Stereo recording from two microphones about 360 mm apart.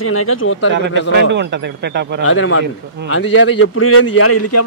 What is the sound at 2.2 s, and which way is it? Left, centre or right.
A man's voice, left.